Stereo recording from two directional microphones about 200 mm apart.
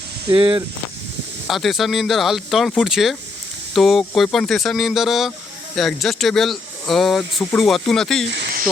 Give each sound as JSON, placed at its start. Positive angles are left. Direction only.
{"t": 0.3, "sound": "speech", "side_deg": -25}
{"t": 1.5, "sound": "speech", "side_deg": 0}